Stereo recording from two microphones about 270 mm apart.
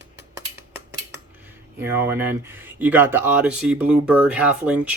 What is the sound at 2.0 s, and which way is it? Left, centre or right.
Speech, centre.